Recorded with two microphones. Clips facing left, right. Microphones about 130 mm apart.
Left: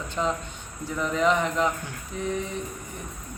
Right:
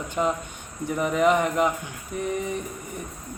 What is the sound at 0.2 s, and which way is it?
A man's voice, 20° right (ahead or behind).